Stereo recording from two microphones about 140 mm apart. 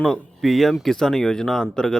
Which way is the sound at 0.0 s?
Centre (ahead or behind).